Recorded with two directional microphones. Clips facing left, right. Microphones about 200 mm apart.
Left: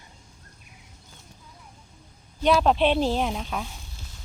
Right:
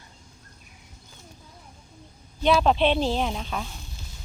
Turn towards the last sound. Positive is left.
turn(degrees=5)  # may be behind; listen again after turning